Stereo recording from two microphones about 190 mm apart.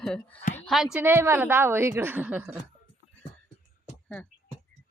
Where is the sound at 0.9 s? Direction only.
10° right (ahead or behind).